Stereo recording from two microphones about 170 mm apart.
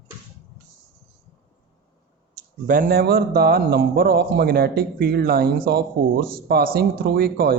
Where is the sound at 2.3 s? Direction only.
50° right (ahead or behind).